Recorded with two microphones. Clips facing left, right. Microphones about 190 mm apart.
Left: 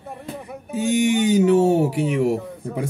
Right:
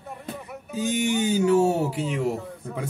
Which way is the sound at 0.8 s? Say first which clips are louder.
Left 5 dB; 70° left (ahead or behind).